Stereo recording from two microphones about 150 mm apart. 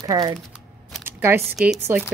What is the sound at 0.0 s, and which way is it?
Speech, 25° right (ahead or behind).